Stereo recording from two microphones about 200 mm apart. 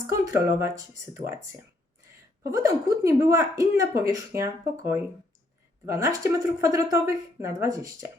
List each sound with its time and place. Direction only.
0.1 s a woman's voice: 15° right (ahead or behind)